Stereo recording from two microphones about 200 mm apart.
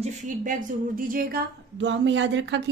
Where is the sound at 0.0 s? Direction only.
40° right (ahead or behind).